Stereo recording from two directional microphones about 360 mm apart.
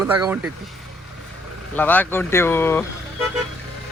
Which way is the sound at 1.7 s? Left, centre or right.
Centre.